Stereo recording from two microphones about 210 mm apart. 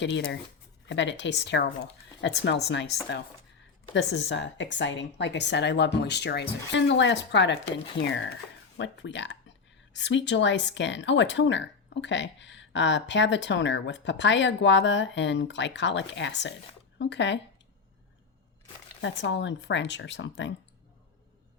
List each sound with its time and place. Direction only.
0.0 s speech: 55° left (ahead or behind)
3.9 s speech: 55° left (ahead or behind)
19.0 s speech: 60° left (ahead or behind)